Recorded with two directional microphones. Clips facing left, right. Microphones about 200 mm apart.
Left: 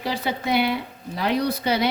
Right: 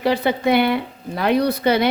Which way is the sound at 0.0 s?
60° right (ahead or behind).